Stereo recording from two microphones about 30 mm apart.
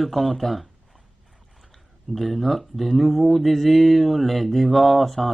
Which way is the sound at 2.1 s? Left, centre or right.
Centre.